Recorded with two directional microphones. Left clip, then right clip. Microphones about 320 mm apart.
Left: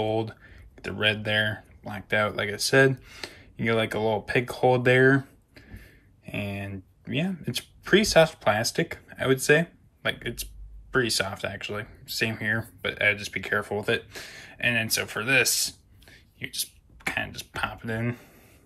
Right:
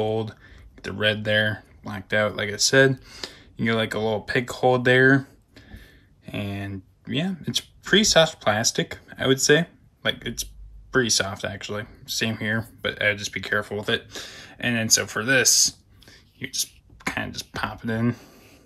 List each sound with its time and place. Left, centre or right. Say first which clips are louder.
0.0 s speech: right 2 dB; centre
5.5 s a sound: right 2 dB; centre
6.2 s speech: right 1 dB; right
6.6 s speech: right 3 dB; centre
9.5 s a sound: right 2 dB; centre
10.9 s speech: right 3 dB; centre